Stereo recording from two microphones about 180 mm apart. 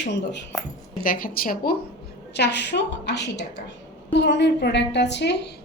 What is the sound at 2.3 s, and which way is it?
A woman's voice, 70° left (ahead or behind).